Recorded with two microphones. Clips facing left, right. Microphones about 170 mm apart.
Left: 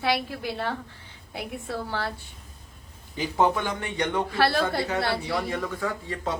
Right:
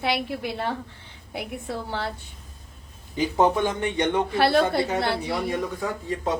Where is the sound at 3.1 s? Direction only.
20° right (ahead or behind).